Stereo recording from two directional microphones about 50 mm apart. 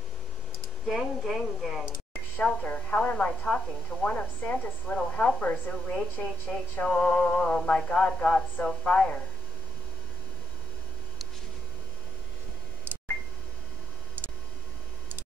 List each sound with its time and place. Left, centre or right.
0.8 s speech: centre
2.4 s a woman's voice: left
6.8 s music: centre
7.6 s a woman's voice: left